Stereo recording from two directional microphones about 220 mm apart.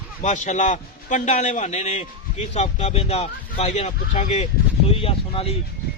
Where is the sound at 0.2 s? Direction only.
30° left (ahead or behind).